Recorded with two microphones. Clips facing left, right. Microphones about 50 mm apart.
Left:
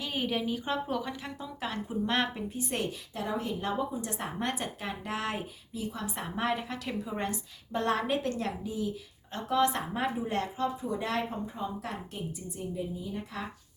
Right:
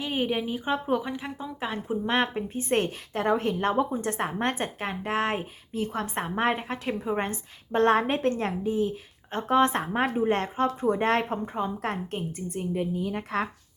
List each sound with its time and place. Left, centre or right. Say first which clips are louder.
0.0 s a woman's voice: right 4 dB; right